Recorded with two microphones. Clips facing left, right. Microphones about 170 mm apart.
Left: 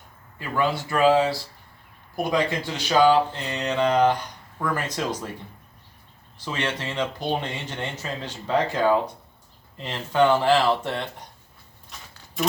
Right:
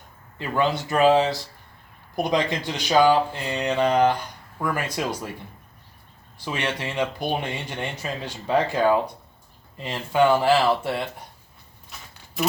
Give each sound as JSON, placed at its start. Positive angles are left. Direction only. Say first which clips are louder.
{"t": 0.3, "sound": "speech", "louder": "right 1 dB", "side_deg": -20}
{"t": 6.4, "sound": "speech", "louder": "right 1 dB", "side_deg": -15}